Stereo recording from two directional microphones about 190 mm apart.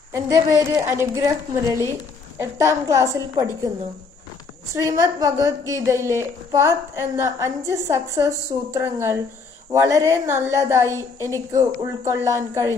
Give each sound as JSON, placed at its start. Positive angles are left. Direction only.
{"t": 0.1, "sound": "a woman's voice", "side_deg": -15}
{"t": 2.3, "sound": "a woman's voice", "side_deg": -15}
{"t": 4.7, "sound": "a woman's voice", "side_deg": -15}